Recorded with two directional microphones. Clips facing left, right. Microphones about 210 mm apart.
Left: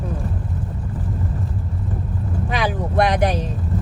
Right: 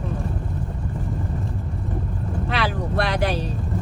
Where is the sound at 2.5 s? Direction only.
15° left (ahead or behind).